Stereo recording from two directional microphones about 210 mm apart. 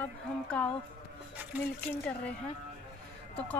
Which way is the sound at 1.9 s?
5° left (ahead or behind).